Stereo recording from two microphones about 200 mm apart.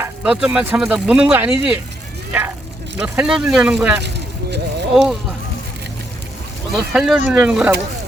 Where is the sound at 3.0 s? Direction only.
5° right (ahead or behind).